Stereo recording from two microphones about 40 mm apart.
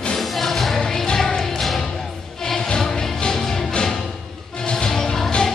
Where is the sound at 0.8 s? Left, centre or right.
Centre.